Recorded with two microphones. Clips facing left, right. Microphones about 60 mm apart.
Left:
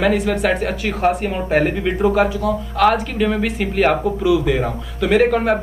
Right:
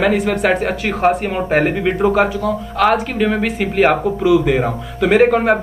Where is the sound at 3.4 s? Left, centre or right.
Centre.